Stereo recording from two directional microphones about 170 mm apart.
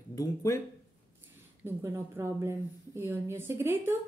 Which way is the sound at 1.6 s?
15° right (ahead or behind).